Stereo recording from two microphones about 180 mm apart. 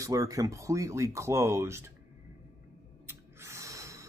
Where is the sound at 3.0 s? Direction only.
15° right (ahead or behind).